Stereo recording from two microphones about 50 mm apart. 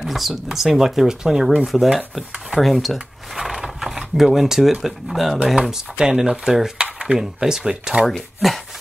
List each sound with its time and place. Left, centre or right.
0.0 s speech: centre
5.6 s speech: centre
6.8 s dishes: centre
7.2 s speech: centre